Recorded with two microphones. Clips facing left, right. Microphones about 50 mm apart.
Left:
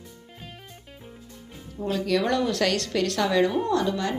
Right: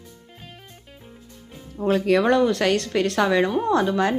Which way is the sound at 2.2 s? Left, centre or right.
Centre.